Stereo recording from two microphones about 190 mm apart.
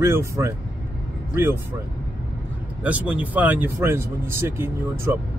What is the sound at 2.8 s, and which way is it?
Speech, 5° right (ahead or behind).